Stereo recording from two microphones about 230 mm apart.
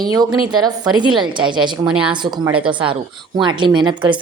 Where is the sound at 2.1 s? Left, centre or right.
Centre.